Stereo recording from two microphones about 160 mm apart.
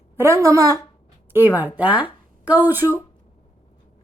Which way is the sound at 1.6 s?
10° right (ahead or behind).